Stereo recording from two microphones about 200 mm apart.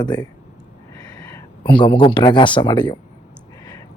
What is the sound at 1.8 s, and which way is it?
Speech, 25° left (ahead or behind).